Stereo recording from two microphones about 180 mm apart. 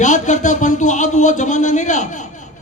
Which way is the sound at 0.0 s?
45° left (ahead or behind).